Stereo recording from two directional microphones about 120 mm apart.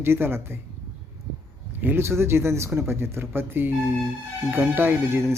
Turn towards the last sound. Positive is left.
turn(degrees=-20)  # may be behind; listen again after turning